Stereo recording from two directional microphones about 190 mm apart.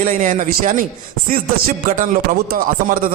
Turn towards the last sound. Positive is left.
turn(degrees=-50)  # may be behind; listen again after turning